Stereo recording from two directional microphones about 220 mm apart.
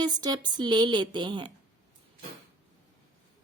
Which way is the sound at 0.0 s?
20° right (ahead or behind).